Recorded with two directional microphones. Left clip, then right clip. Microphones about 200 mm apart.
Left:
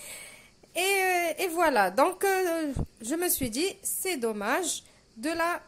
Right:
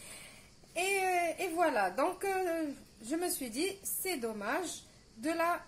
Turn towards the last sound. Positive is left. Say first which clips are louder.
# left 4 dB
turn(degrees=40)  # may be behind; listen again after turning